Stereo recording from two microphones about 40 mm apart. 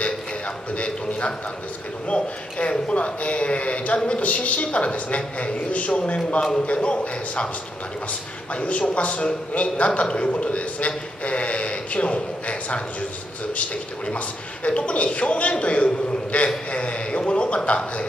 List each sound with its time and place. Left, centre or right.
0.7 s a man's voice: left
8.5 s a man's voice: left